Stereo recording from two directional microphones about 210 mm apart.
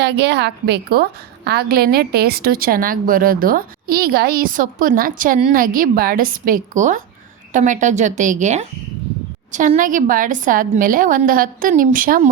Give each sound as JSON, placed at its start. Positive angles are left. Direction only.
{"t": 0.0, "sound": "a woman's voice", "side_deg": -55}